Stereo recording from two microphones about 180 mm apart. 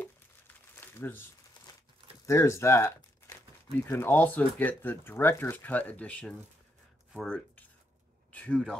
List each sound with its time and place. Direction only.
0.7 s crumpling: 10° left (ahead or behind)
2.2 s speech: 15° left (ahead or behind)